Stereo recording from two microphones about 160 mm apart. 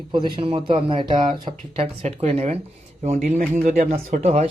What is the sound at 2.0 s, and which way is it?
Speech, 45° right (ahead or behind).